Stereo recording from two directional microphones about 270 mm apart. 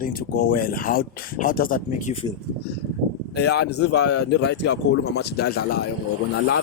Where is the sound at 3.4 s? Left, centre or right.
Left.